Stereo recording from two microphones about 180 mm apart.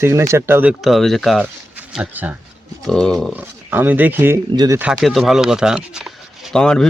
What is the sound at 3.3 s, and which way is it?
Speech, 10° right (ahead or behind).